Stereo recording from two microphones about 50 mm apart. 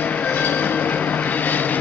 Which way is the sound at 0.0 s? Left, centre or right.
Left.